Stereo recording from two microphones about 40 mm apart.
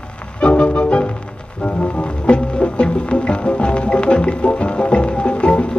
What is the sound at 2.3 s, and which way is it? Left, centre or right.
Music, left.